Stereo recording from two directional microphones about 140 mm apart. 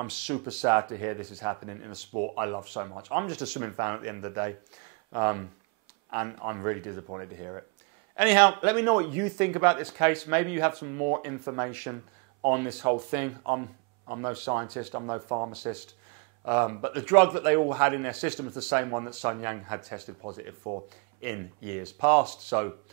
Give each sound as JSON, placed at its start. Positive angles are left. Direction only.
{"t": 0.0, "sound": "speech", "side_deg": -20}
{"t": 21.2, "sound": "speech", "side_deg": -20}